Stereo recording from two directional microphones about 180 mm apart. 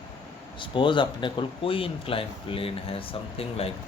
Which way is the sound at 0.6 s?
25° left (ahead or behind).